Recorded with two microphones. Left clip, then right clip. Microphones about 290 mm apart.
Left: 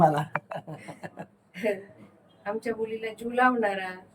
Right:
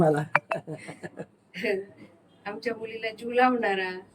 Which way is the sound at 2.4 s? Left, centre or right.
Centre.